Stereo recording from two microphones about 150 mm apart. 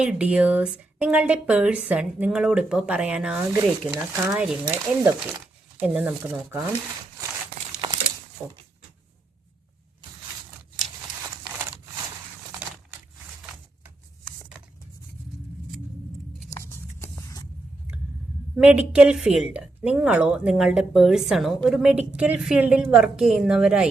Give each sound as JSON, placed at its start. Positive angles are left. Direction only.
{"t": 0.0, "sound": "speech", "side_deg": -5}
{"t": 3.6, "sound": "speech", "side_deg": -20}
{"t": 8.4, "sound": "speech", "side_deg": -10}
{"t": 16.5, "sound": "a sound", "side_deg": 15}
{"t": 18.5, "sound": "a woman's voice", "side_deg": -10}